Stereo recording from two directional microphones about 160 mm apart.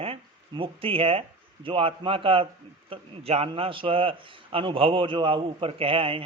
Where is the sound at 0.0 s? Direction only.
35° right (ahead or behind).